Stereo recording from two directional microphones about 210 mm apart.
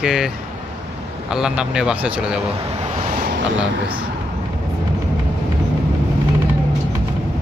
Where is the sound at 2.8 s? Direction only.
30° right (ahead or behind).